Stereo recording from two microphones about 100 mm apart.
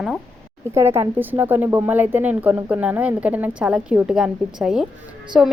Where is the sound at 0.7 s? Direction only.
25° right (ahead or behind).